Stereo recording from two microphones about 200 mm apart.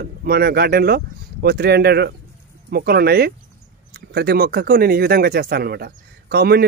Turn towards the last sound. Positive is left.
turn(degrees=-50)  # may be behind; listen again after turning